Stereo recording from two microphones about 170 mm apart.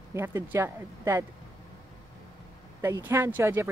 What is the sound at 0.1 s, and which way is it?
Speech, 15° right (ahead or behind).